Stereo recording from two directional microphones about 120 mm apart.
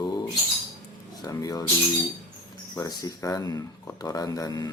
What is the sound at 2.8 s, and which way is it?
Speech, 30° left (ahead or behind).